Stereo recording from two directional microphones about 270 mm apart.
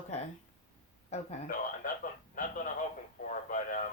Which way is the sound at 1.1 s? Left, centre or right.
Left.